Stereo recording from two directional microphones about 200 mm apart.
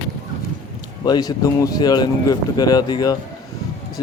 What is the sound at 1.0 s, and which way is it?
A man's voice, 20° left (ahead or behind).